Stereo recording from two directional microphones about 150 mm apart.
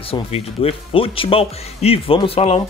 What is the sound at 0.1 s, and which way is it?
Speech, 40° left (ahead or behind).